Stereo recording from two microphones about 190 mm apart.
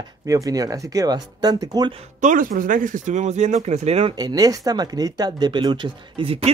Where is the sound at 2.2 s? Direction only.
45° right (ahead or behind).